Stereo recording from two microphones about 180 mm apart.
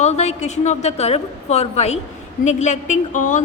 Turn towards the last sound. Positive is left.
turn(degrees=45)  # may be behind; listen again after turning